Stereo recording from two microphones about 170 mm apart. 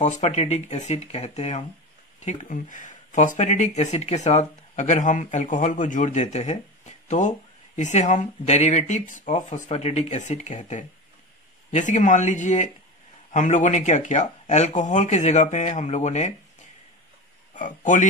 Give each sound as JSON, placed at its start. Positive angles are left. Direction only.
{"t": 0.0, "sound": "speech", "side_deg": 45}
{"t": 17.6, "sound": "speech", "side_deg": 50}